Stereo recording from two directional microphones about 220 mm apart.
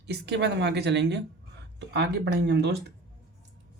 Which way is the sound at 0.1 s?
50° right (ahead or behind).